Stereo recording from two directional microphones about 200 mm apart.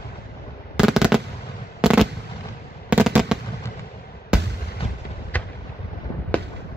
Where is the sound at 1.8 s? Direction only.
5° right (ahead or behind).